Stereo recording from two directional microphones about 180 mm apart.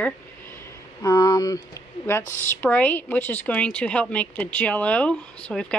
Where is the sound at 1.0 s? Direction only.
20° left (ahead or behind).